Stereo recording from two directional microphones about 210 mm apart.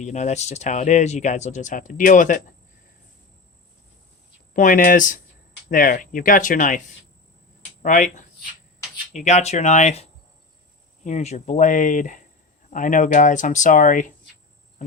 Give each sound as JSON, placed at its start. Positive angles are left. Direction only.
{"t": 0.0, "sound": "speech", "side_deg": 35}
{"t": 4.5, "sound": "speech", "side_deg": 40}